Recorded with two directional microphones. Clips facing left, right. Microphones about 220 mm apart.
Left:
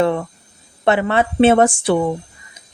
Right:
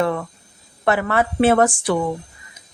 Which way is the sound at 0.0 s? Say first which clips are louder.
Left 4 dB; 25° left (ahead or behind).